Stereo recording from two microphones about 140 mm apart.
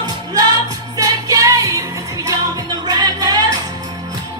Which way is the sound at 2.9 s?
25° right (ahead or behind).